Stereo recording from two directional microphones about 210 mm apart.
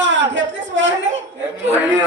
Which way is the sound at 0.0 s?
60° right (ahead or behind).